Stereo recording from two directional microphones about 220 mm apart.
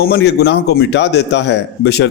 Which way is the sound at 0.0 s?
50° left (ahead or behind).